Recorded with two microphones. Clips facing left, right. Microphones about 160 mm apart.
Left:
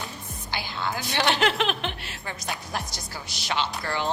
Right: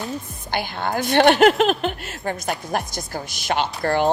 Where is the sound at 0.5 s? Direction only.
55° right (ahead or behind).